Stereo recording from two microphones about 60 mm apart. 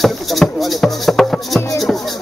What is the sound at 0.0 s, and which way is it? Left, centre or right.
Music, centre.